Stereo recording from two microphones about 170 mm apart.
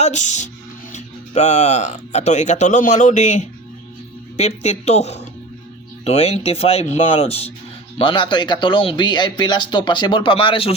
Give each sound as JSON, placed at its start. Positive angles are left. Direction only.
{"t": 0.0, "sound": "speech", "side_deg": 45}